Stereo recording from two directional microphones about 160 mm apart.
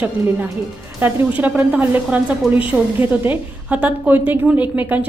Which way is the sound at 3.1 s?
10° right (ahead or behind).